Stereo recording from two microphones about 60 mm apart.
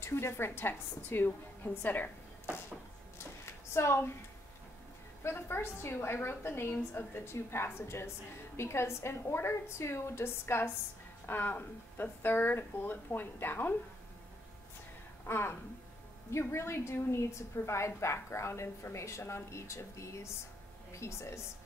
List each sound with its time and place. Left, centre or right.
0.0 s speech: left
3.4 s a sound: left
5.2 s a woman's voice: left
15.2 s a woman's voice: left